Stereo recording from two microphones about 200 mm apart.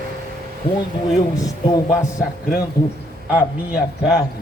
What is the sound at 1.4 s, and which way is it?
A man's voice, 20° left (ahead or behind).